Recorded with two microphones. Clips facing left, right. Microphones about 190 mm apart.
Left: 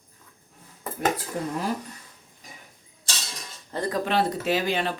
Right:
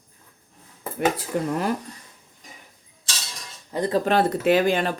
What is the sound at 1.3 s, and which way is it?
Speech, 70° right (ahead or behind).